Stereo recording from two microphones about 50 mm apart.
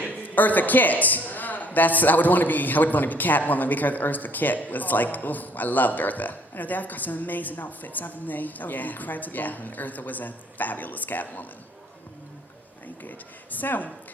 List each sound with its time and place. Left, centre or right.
0.3 s speech: left
13.0 s speech: left